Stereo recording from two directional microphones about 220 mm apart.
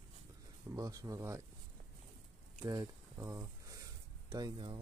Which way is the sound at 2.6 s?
20° right (ahead or behind).